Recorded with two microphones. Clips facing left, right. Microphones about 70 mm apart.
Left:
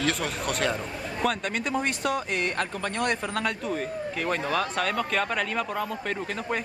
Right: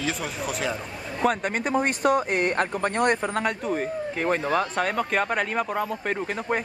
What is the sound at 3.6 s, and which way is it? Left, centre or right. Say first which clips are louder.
Speech: right 3 dB; centre.